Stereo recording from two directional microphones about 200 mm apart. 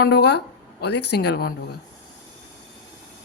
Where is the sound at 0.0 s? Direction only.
55° left (ahead or behind).